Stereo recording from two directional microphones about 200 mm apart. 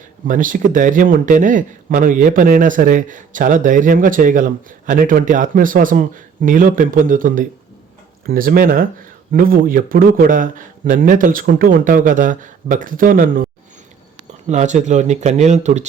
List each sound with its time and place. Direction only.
0.3 s a man's voice: 40° right (ahead or behind)